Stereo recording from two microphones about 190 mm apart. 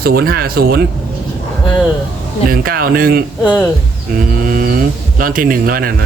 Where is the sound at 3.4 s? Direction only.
5° right (ahead or behind).